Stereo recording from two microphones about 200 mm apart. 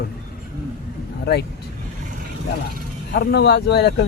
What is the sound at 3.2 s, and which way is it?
Speech, 55° left (ahead or behind).